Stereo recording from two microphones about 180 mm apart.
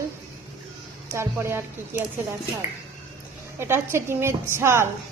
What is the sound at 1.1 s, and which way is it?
Speech, 15° right (ahead or behind).